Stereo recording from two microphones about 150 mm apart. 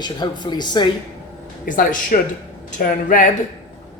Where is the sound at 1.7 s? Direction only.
70° left (ahead or behind).